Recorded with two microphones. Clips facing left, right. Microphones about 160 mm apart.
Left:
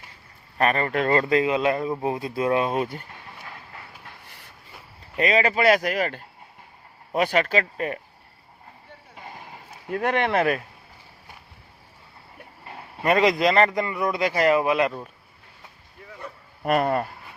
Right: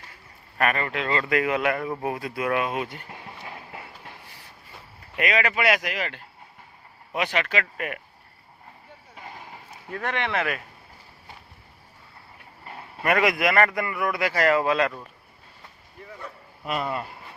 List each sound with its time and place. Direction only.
0.6 s speech: 35° left (ahead or behind)
1.3 s a man's voice: 20° left (ahead or behind)
5.1 s speech: 30° left (ahead or behind)
9.9 s speech: 40° left (ahead or behind)
13.0 s a man's voice: 25° left (ahead or behind)
16.0 s a sound: 5° left (ahead or behind)
16.6 s speech: 55° left (ahead or behind)